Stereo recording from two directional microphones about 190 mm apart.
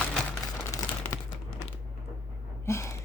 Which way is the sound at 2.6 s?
15° left (ahead or behind).